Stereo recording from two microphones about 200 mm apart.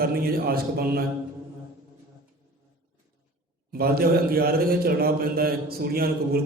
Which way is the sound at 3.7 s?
50° right (ahead or behind).